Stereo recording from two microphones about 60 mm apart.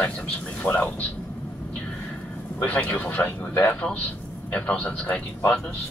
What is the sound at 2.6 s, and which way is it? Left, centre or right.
Speech, left.